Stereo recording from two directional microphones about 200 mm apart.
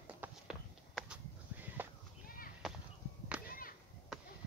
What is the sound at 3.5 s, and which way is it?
Whip, 45° left (ahead or behind).